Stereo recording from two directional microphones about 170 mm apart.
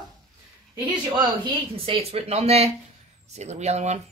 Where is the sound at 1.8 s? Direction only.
35° right (ahead or behind).